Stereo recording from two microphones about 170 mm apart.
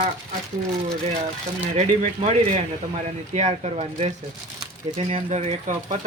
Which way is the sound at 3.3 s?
40° right (ahead or behind).